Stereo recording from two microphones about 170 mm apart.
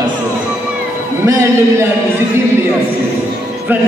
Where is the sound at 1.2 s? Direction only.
15° right (ahead or behind).